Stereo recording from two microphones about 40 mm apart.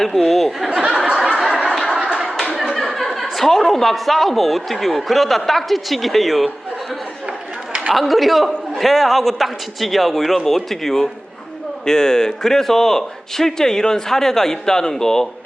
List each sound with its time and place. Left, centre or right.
0.0 s speech: centre
0.7 s a sound: right
1.4 s snicker: centre
1.7 s a sound: centre
2.8 s speech: centre
7.9 s speech: centre